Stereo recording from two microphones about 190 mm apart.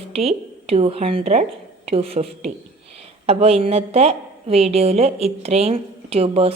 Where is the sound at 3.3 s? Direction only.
30° right (ahead or behind).